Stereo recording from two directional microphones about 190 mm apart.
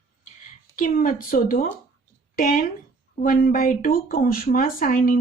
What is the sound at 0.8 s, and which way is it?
A woman's voice, 50° left (ahead or behind).